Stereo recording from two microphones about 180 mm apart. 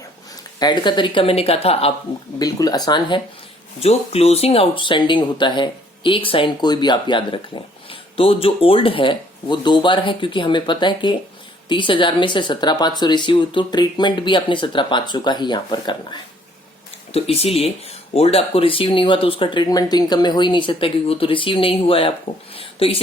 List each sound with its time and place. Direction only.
0.6 s speech: 25° left (ahead or behind)
2.4 s speech: 20° left (ahead or behind)
3.8 s speech: 35° left (ahead or behind)
22.5 s a sound: 30° left (ahead or behind)